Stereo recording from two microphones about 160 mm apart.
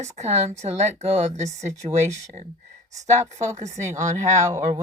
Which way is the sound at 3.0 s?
45° right (ahead or behind).